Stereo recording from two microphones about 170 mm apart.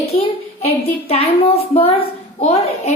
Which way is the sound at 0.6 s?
35° left (ahead or behind).